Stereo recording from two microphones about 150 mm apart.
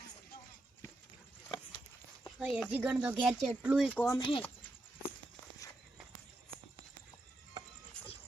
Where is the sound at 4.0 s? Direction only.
15° left (ahead or behind).